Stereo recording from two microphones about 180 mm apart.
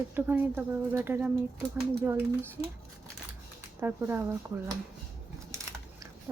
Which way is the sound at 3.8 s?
15° right (ahead or behind).